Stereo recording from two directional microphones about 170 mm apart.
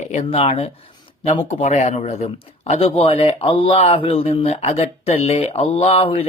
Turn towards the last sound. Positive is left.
turn(degrees=35)  # may be behind; listen again after turning